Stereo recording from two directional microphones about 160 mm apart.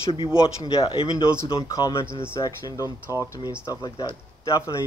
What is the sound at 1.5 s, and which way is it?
Speech, 20° left (ahead or behind).